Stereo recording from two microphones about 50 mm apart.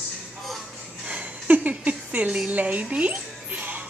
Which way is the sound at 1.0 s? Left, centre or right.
Right.